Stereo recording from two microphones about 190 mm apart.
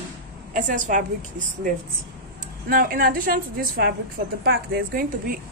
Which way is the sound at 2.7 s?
50° right (ahead or behind).